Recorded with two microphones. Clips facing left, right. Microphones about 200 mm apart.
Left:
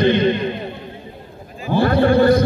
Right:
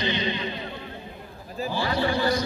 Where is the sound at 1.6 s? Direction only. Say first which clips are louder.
Left 11 dB; 55° left (ahead or behind).